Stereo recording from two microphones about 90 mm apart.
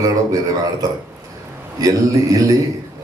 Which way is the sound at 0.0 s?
45° right (ahead or behind).